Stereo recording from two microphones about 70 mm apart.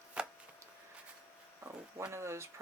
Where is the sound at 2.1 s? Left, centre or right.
Right.